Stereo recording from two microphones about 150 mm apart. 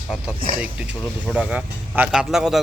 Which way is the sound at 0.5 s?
10° right (ahead or behind).